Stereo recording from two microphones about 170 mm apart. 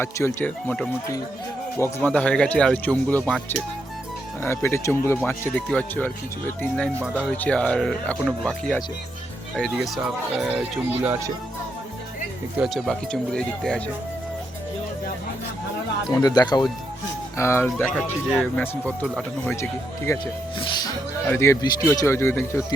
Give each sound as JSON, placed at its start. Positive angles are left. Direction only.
{"t": 0.0, "sound": "speech", "side_deg": 15}
{"t": 12.5, "sound": "speech", "side_deg": 0}
{"t": 16.1, "sound": "speech", "side_deg": 20}
{"t": 20.1, "sound": "speech", "side_deg": 20}
{"t": 21.2, "sound": "speech", "side_deg": 15}